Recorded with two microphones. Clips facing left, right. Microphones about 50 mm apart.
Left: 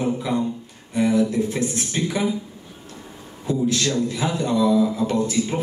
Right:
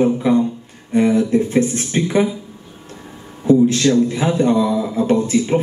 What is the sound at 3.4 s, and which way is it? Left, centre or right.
Speech, right.